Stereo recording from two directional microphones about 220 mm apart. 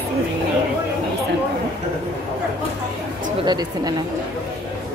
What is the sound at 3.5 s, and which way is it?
Speech, 20° right (ahead or behind).